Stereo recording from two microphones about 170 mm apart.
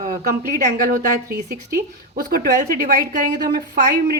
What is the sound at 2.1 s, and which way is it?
Speech, 60° right (ahead or behind).